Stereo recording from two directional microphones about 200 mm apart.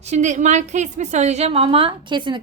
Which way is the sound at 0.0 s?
35° right (ahead or behind).